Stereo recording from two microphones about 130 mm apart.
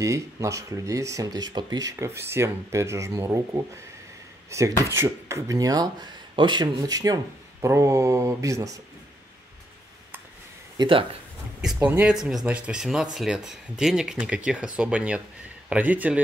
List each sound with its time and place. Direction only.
0.0 s speech: 25° right (ahead or behind)
10.8 s speech: 40° right (ahead or behind)
11.6 s speech: 5° right (ahead or behind)